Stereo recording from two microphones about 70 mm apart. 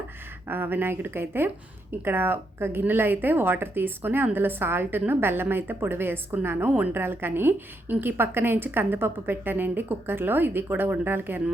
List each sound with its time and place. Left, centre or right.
0.4 s a woman's voice: right